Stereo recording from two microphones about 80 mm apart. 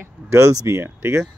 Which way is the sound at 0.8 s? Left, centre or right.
Right.